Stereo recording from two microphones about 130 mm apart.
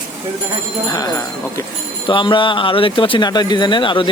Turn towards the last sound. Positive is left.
turn(degrees=40)  # may be behind; listen again after turning